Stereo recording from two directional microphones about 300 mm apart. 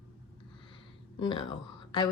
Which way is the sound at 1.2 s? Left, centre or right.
Centre.